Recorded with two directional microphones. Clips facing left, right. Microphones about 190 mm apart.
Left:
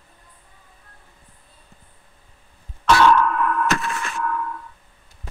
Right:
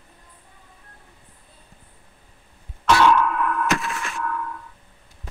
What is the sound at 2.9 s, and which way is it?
Music, 10° right (ahead or behind).